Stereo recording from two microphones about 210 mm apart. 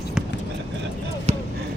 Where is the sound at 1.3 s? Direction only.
30° right (ahead or behind).